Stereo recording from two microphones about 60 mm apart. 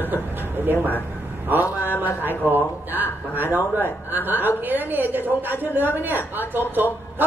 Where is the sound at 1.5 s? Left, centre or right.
Right.